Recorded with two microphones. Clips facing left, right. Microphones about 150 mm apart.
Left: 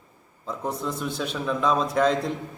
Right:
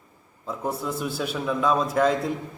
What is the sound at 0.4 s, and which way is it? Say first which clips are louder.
A man's voice: right 1 dB; 5° right (ahead or behind).